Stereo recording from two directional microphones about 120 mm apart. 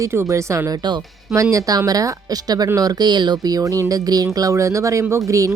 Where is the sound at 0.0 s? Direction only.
25° right (ahead or behind).